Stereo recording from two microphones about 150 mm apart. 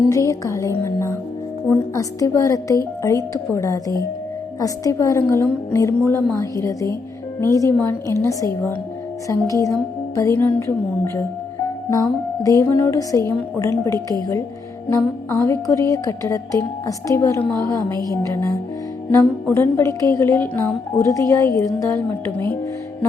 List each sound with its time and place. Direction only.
0.1 s a woman's voice: 20° left (ahead or behind)
10.2 s music: 15° left (ahead or behind)
12.5 s a woman's voice: 20° left (ahead or behind)